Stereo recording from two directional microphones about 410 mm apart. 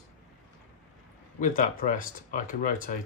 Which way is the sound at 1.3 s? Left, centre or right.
Centre.